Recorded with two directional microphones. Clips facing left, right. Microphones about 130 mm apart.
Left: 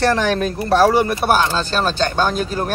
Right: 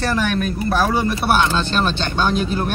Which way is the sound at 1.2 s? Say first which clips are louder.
Left 1 dB; 40° left (ahead or behind).